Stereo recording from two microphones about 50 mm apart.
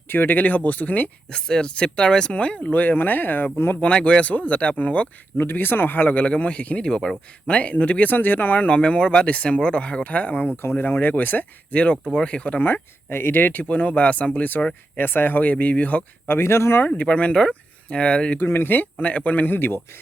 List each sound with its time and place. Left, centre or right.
0.1 s speech: left
1.3 s speech: centre; by 3.8 s left
3.8 s speech: left
5.4 s speech: left
6.1 s speech: left
8.6 s speech: left
10.8 s speech: left
11.7 s speech: left
12.6 s speech: left
14.9 s speech: left
16.3 s speech: left
17.1 s speech: left
18.3 s speech: left
18.7 s speech: left